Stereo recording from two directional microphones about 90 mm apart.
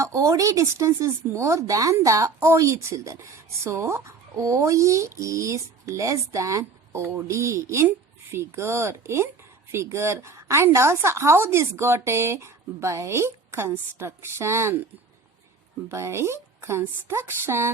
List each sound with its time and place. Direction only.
0.0 s speech: 35° right (ahead or behind)
15.9 s speech: 30° right (ahead or behind)